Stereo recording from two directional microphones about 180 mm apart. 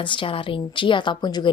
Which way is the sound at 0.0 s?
30° left (ahead or behind).